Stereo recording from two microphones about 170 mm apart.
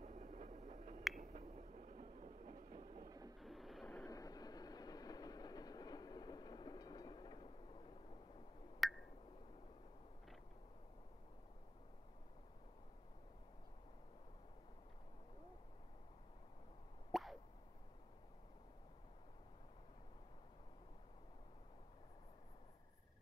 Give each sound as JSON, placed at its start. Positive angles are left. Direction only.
{"t": 0.0, "sound": "a sound", "side_deg": -45}
{"t": 1.1, "sound": "train", "side_deg": -45}
{"t": 3.1, "sound": "train", "side_deg": -20}
{"t": 3.3, "sound": "vehicle", "side_deg": 0}
{"t": 4.1, "sound": "train", "side_deg": 20}
{"t": 8.7, "sound": "a sound", "side_deg": 0}
{"t": 17.1, "sound": "plop", "side_deg": 0}